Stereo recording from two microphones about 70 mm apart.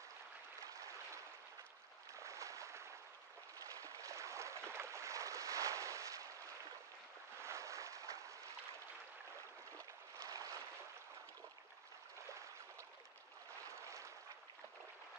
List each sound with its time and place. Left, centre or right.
2.1 s a sound: right
9.8 s boat: right
13.7 s boat: right